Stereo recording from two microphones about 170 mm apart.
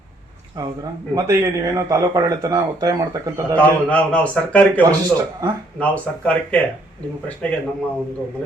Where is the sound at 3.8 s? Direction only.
10° left (ahead or behind).